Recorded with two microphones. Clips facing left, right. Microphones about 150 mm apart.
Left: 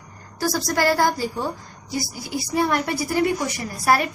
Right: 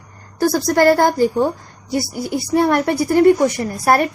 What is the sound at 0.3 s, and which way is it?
A woman's voice, 55° right (ahead or behind).